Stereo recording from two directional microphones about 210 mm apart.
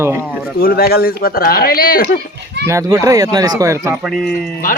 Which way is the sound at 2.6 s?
15° right (ahead or behind).